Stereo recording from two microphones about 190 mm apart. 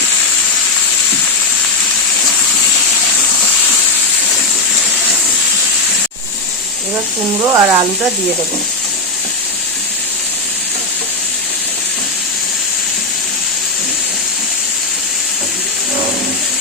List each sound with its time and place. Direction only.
7.5 s speech: 15° right (ahead or behind)